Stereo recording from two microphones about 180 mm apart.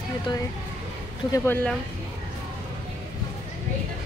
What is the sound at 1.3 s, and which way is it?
Speech, 10° left (ahead or behind).